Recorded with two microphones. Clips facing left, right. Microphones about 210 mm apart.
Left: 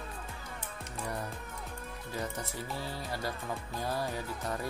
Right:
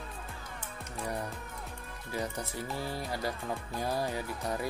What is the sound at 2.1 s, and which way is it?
Speech, 15° right (ahead or behind).